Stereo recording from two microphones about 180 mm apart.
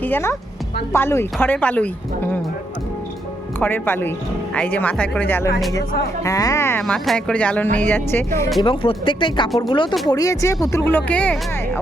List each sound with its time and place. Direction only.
0.0 s a woman's voice: 15° left (ahead or behind)
3.6 s speech: 10° left (ahead or behind)
8.6 s speech: 30° left (ahead or behind); by 11.3 s 10° left (ahead or behind)